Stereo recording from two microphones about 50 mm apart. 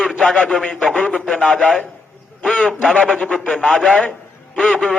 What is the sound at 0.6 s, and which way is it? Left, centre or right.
Speech, left.